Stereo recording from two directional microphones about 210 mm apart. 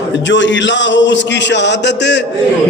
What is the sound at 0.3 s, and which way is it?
A man's voice, 60° left (ahead or behind).